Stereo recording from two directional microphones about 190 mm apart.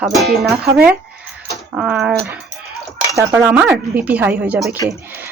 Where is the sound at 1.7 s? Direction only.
5° right (ahead or behind).